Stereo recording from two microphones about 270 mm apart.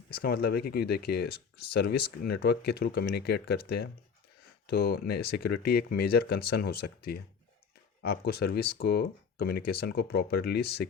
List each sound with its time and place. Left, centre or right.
0.1 s speech: left